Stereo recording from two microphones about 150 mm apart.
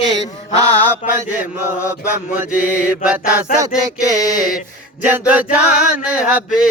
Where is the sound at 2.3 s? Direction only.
10° right (ahead or behind).